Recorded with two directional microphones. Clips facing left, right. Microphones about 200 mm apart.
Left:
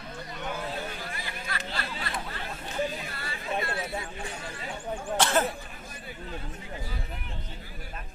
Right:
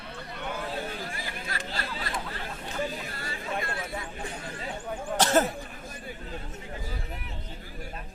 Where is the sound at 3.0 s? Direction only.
40° right (ahead or behind).